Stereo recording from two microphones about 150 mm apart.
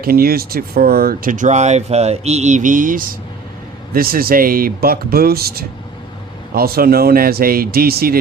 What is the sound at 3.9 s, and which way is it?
Speech, 80° right.